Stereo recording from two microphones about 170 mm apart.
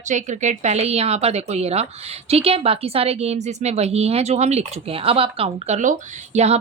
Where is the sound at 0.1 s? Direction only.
45° right (ahead or behind).